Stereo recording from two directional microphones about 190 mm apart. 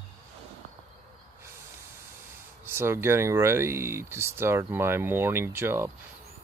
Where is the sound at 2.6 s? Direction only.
10° right (ahead or behind).